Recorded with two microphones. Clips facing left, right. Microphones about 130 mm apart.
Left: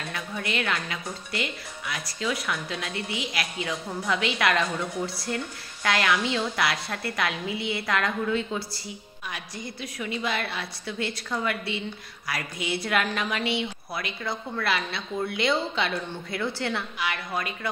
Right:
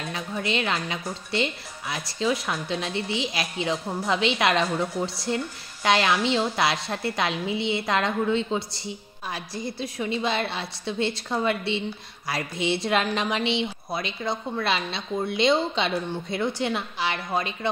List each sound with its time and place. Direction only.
0.1 s a woman's voice: 25° right (ahead or behind)